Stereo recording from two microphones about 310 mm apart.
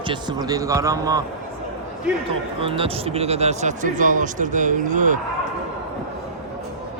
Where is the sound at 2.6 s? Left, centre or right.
Centre.